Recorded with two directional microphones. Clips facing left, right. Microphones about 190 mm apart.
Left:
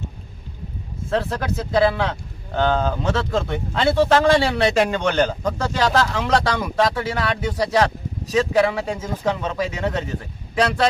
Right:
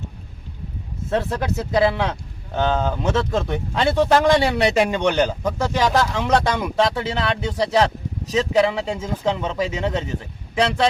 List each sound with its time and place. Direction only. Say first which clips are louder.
1.7 s speech: left 1 dB; 20° right (ahead or behind)